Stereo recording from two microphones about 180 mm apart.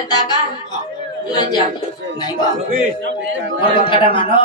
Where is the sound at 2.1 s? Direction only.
20° left (ahead or behind).